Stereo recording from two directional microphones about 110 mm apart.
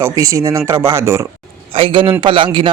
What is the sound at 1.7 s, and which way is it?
A man's voice, 55° right (ahead or behind).